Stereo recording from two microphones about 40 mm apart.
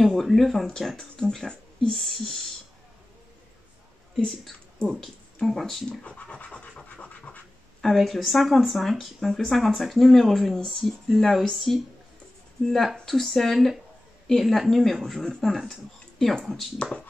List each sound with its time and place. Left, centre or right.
0.0 s speech: centre
0.9 s speech: left
1.5 s a sound: left
2.0 s speech: centre
5.5 s speech: centre
6.0 s scratch: left
7.8 s speech: centre
16.7 s speech: left